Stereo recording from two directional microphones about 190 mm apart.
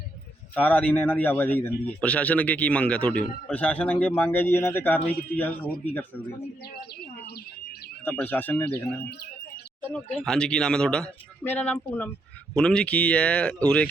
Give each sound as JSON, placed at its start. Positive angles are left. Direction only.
{"t": 0.5, "sound": "a man's voice", "side_deg": 10}
{"t": 6.7, "sound": "bird", "side_deg": 55}
{"t": 8.0, "sound": "a man's voice", "side_deg": 10}